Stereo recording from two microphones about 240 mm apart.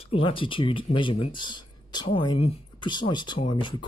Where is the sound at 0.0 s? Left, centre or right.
Left.